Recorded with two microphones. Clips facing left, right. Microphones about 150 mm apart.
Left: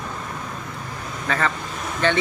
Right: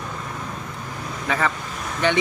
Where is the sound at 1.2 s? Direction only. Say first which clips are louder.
Even; 10° right (ahead or behind).